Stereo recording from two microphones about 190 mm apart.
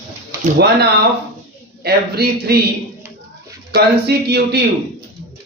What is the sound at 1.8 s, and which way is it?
Speech, 55° right (ahead or behind).